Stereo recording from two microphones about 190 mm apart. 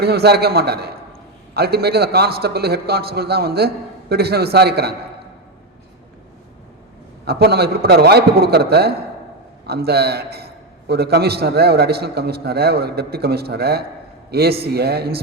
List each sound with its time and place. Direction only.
0.0 s a man's voice: 55° right (ahead or behind)
7.3 s a man's voice: 55° right (ahead or behind)